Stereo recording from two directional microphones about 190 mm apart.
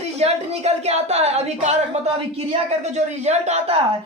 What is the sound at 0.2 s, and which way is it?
Speech, 35° right (ahead or behind).